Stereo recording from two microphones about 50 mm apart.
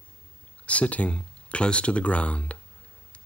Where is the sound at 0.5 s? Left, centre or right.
Left.